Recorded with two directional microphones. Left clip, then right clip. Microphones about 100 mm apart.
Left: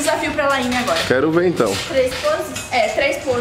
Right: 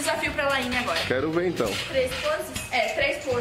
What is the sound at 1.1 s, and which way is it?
Speech, 5° left (ahead or behind).